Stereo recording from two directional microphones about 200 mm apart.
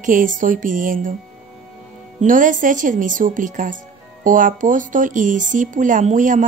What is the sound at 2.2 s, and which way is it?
A woman's voice, 40° right (ahead or behind).